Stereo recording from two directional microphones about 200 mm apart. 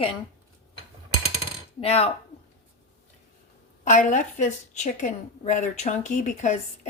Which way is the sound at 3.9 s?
40° left (ahead or behind).